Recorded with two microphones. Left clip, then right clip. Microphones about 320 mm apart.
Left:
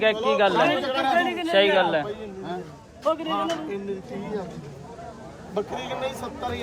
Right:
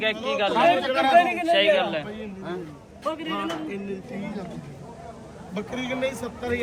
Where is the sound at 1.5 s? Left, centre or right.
Left.